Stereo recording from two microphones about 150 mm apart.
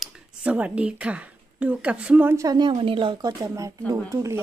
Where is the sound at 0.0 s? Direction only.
10° right (ahead or behind).